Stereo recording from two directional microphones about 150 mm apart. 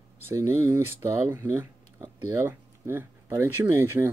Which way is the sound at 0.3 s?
15° right (ahead or behind).